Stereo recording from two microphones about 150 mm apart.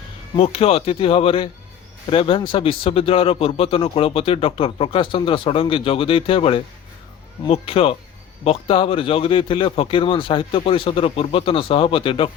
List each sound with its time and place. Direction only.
0.3 s a man's voice: 45° left (ahead or behind)